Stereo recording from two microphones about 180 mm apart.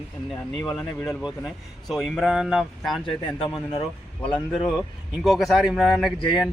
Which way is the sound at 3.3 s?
30° left (ahead or behind).